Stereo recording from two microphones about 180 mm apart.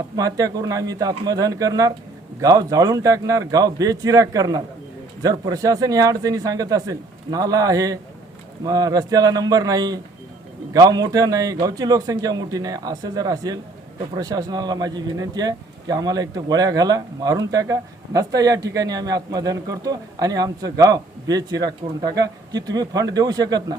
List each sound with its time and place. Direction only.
0.2 s speech: 20° right (ahead or behind)